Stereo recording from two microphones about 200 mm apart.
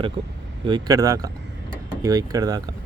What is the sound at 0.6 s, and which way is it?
Speech, 20° right (ahead or behind).